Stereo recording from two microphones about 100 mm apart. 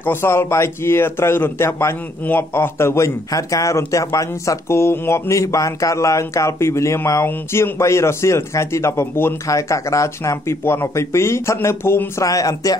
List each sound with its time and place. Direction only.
0.0 s a man's voice: 25° left (ahead or behind)
12.3 s speech: 35° left (ahead or behind)